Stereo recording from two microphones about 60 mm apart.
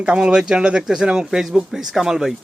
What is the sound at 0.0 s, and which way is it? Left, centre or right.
A man's voice, centre.